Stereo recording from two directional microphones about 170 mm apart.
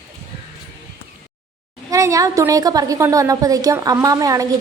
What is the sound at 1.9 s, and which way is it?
A woman's voice, 20° right (ahead or behind).